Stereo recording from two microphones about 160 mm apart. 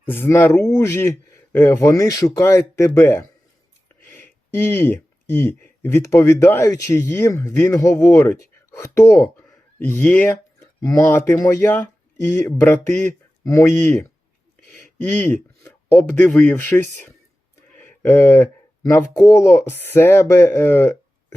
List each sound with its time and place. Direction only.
0.0 s speech: 10° left (ahead or behind)
17.7 s a sound: 15° left (ahead or behind)
18.9 s speech: 15° left (ahead or behind)